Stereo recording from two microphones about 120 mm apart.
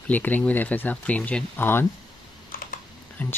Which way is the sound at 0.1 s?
15° left (ahead or behind).